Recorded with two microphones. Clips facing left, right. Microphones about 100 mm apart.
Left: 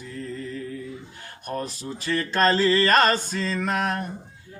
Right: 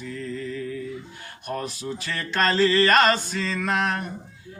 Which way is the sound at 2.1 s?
35° left (ahead or behind).